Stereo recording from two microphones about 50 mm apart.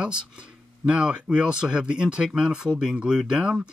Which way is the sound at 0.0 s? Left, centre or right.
Centre.